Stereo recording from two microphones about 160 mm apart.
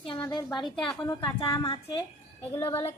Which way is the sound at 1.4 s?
20° left (ahead or behind).